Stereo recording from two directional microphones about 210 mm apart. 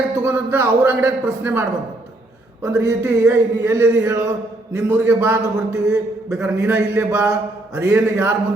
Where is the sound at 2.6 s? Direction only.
15° right (ahead or behind).